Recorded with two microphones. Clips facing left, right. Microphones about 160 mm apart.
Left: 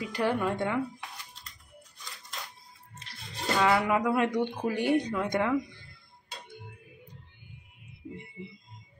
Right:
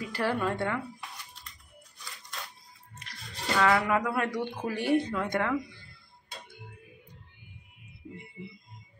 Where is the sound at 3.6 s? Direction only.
15° left (ahead or behind).